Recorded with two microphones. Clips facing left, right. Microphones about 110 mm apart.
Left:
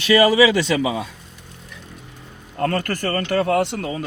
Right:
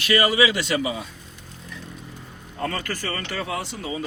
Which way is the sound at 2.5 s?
55° left (ahead or behind).